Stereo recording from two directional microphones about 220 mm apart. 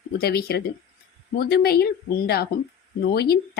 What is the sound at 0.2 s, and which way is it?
A woman's voice, 45° left (ahead or behind).